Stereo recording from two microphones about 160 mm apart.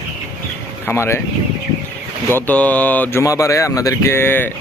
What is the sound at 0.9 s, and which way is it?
Speech, 15° left (ahead or behind).